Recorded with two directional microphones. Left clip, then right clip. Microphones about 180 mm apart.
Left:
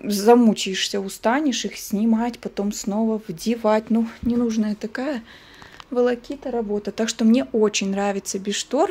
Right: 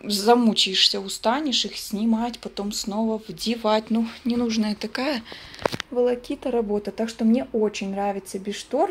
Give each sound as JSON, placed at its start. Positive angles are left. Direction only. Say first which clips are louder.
{"t": 0.0, "sound": "speech", "louder": "left 3 dB", "side_deg": 45}
{"t": 6.4, "sound": "speech", "louder": "right 2 dB", "side_deg": -5}
{"t": 7.0, "sound": "speech", "louder": "left 6 dB", "side_deg": 30}